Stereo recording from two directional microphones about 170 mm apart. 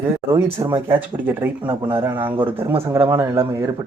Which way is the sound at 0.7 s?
15° right (ahead or behind).